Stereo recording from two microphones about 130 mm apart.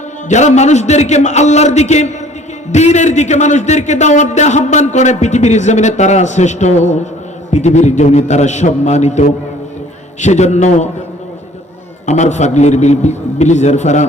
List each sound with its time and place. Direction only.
0.3 s a man's voice: 65° left (ahead or behind)
12.0 s a man's voice: 65° left (ahead or behind)